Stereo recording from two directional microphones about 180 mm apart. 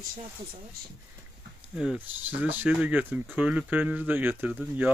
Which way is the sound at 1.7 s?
5° right (ahead or behind).